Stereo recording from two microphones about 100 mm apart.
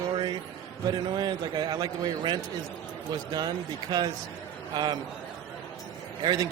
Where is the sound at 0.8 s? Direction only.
50° right (ahead or behind).